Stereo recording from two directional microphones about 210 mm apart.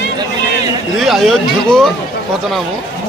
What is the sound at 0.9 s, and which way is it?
Speech, centre (ahead or behind).